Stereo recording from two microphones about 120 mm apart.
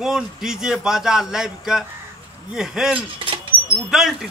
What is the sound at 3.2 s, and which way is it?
Speech, 50° right (ahead or behind).